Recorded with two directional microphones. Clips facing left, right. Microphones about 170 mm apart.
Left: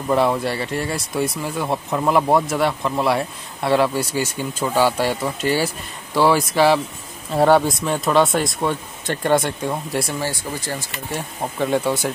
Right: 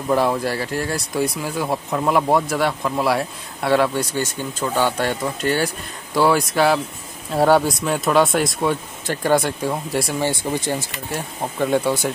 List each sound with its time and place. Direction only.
0.1 s speech: centre (ahead or behind)
10.2 s speech: 20° right (ahead or behind)
11.1 s speech: centre (ahead or behind)